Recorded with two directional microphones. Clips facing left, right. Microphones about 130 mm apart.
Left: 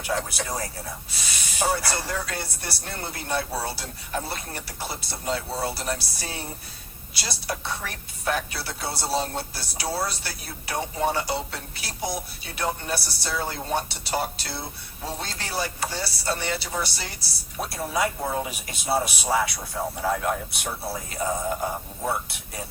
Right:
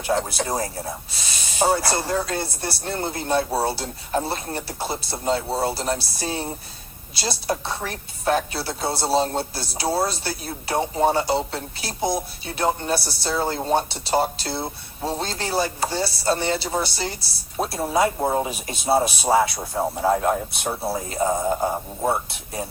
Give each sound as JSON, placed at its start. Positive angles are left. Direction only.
{"t": 0.1, "sound": "a woman's voice", "side_deg": -30}